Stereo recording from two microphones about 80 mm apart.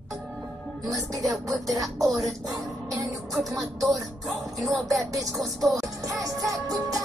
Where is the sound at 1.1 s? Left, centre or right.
Centre.